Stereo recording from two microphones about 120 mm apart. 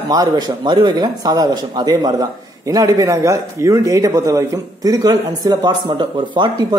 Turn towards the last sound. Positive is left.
turn(degrees=-40)  # may be behind; listen again after turning